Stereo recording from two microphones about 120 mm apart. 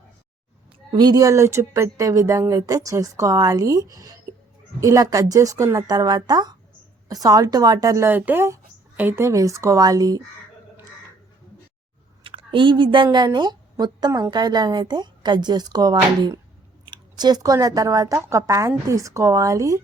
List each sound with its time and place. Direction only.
0.9 s speech: 35° right (ahead or behind)
12.2 s a woman's voice: 45° right (ahead or behind); by 19.8 s 30° right (ahead or behind)